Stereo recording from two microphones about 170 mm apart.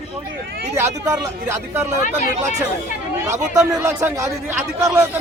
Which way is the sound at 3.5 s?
20° right (ahead or behind).